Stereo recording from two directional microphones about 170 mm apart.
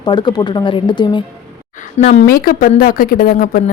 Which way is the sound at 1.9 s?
45° left (ahead or behind).